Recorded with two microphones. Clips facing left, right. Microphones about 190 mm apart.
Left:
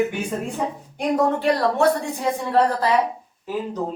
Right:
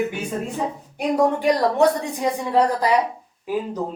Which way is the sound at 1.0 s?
15° right (ahead or behind).